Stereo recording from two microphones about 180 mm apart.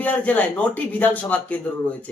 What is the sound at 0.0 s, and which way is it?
Speech, 10° left (ahead or behind).